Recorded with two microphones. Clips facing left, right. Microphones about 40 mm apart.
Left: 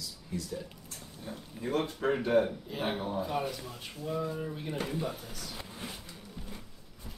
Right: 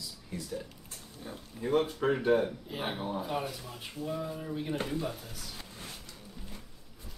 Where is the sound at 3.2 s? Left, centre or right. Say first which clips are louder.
Left 2 dB; centre.